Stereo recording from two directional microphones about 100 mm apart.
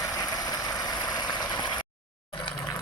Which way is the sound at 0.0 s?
35° left (ahead or behind).